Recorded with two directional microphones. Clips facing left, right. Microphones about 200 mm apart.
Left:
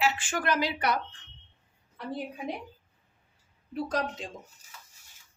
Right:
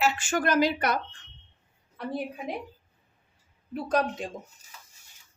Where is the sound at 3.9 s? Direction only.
55° right (ahead or behind).